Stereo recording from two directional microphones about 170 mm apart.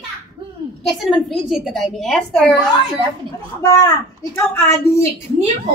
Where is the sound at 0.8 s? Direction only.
Centre (ahead or behind).